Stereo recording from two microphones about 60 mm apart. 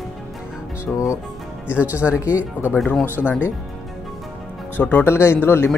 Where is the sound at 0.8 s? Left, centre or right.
Left.